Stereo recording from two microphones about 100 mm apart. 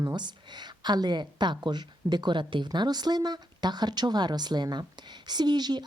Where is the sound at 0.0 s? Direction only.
45° right (ahead or behind).